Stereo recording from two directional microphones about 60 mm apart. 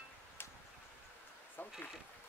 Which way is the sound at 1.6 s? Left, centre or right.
Left.